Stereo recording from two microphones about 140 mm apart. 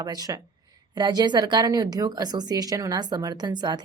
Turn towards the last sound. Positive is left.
turn(degrees=-30)  # may be behind; listen again after turning